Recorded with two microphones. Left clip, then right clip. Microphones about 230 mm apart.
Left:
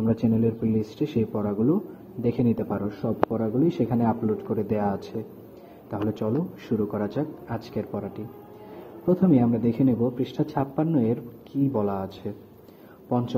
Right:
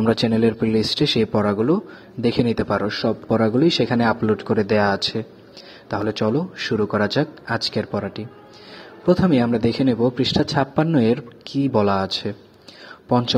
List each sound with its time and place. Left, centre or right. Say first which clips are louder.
0.0 s a man's voice: right 6 dB; right